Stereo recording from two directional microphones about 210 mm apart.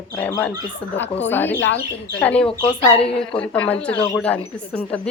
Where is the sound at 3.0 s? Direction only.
30° left (ahead or behind).